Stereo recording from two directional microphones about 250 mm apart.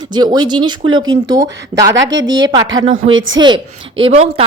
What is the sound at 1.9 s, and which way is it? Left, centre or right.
A woman's voice, right.